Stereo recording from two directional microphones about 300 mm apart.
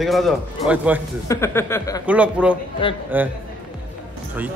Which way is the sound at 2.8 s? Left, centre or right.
Centre.